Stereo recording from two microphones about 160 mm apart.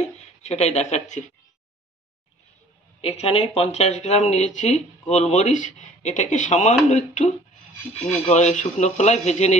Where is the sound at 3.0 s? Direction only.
40° left (ahead or behind).